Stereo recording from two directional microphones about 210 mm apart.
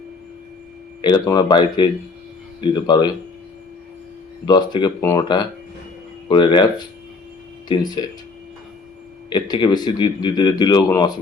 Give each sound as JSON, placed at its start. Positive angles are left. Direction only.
{"t": 1.0, "sound": "speech", "side_deg": 20}
{"t": 4.4, "sound": "speech", "side_deg": 20}
{"t": 9.3, "sound": "speech", "side_deg": 20}